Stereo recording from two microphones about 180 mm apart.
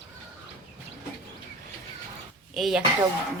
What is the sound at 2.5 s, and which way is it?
Speech, centre (ahead or behind).